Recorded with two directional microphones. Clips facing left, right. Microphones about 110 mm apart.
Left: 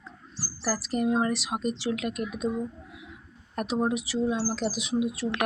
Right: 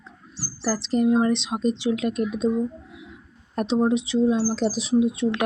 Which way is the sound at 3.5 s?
25° right (ahead or behind).